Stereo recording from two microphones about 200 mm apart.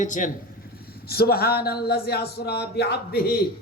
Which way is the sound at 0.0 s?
40° left (ahead or behind).